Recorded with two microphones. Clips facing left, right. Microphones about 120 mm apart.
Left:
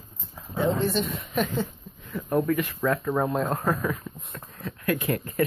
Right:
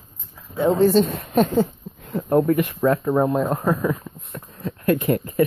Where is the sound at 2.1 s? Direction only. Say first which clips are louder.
Right 6 dB; 25° right (ahead or behind).